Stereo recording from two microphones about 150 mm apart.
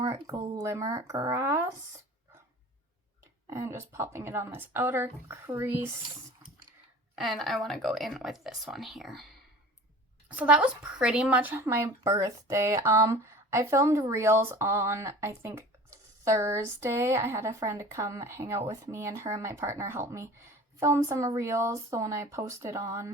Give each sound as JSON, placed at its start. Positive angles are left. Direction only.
{"t": 0.0, "sound": "a woman's voice", "side_deg": -25}
{"t": 3.5, "sound": "speech", "side_deg": -20}
{"t": 7.2, "sound": "a woman's voice", "side_deg": 0}